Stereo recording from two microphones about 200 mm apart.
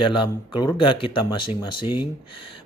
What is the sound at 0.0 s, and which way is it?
A man's voice, 25° left (ahead or behind).